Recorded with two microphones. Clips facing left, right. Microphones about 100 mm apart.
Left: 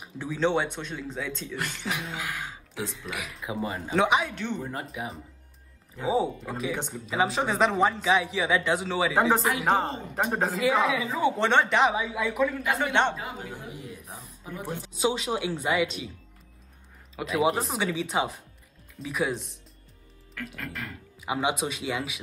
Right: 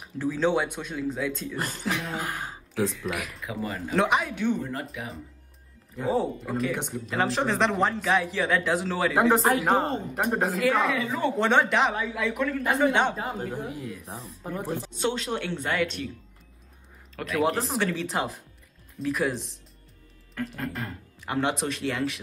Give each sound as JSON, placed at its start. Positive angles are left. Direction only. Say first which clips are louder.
{"t": 0.0, "sound": "speech", "louder": "right 2 dB", "side_deg": 0}
{"t": 1.6, "sound": "speech", "louder": "right 2 dB", "side_deg": -35}
{"t": 2.1, "sound": "throat clearing", "louder": "right 2 dB", "side_deg": -35}
{"t": 3.1, "sound": "speech", "louder": "right 4 dB", "side_deg": 0}
{"t": 3.3, "sound": "speech", "louder": "left 1 dB", "side_deg": 25}
{"t": 3.9, "sound": "speech", "louder": "even", "side_deg": 0}
{"t": 5.0, "sound": "speech", "louder": "left 2 dB", "side_deg": 20}
{"t": 5.9, "sound": "speech", "louder": "even", "side_deg": 0}
{"t": 13.1, "sound": "speech", "louder": "right 5 dB", "side_deg": -40}
{"t": 14.0, "sound": "speech", "louder": "right 4 dB", "side_deg": -30}
{"t": 14.5, "sound": "speech", "louder": "right 4 dB", "side_deg": 0}
{"t": 17.1, "sound": "speech", "louder": "even", "side_deg": 5}
{"t": 20.5, "sound": "speech", "louder": "right 4 dB", "side_deg": -30}
{"t": 21.2, "sound": "speech", "louder": "even", "side_deg": 5}